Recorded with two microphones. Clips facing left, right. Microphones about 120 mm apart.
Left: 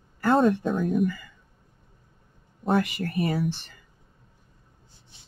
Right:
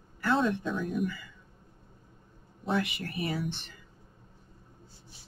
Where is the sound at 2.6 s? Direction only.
45° left (ahead or behind).